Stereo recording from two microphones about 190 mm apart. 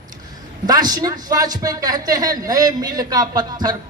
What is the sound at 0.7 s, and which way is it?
A woman's voice, 20° right (ahead or behind).